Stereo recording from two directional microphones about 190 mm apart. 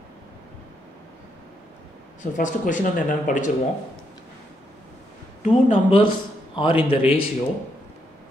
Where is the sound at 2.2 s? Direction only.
40° left (ahead or behind).